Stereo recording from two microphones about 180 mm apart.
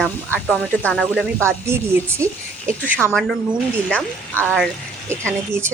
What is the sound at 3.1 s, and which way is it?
A woman's voice, 5° left (ahead or behind).